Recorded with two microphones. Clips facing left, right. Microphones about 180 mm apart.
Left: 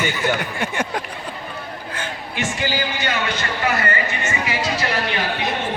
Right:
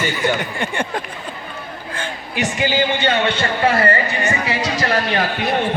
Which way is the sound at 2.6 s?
20° right (ahead or behind).